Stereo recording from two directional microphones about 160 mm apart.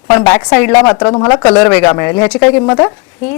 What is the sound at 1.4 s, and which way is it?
Speech, 5° left (ahead or behind).